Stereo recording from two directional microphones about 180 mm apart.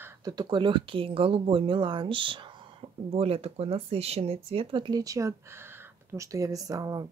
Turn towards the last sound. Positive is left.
turn(degrees=-20)  # may be behind; listen again after turning